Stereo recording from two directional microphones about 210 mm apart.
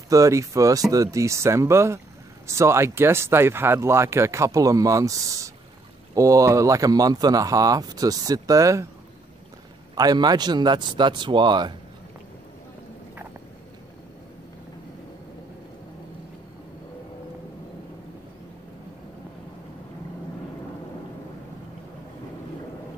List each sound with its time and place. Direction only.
0.1 s speech: 15° right (ahead or behind)
9.9 s a man's voice: 20° right (ahead or behind)